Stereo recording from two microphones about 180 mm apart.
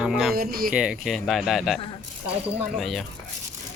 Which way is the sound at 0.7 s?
5° right (ahead or behind).